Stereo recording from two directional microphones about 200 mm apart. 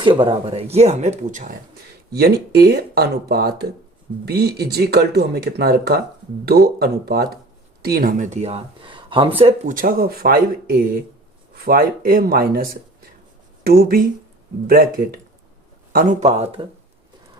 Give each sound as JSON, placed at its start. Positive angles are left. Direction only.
{"t": 0.0, "sound": "speech", "side_deg": -25}
{"t": 2.1, "sound": "speech", "side_deg": -50}
{"t": 9.7, "sound": "speech", "side_deg": -45}
{"t": 13.7, "sound": "speech", "side_deg": -50}